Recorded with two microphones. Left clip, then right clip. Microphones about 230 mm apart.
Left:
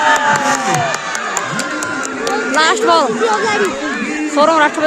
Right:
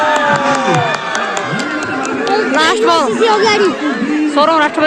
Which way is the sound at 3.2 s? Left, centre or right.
Right.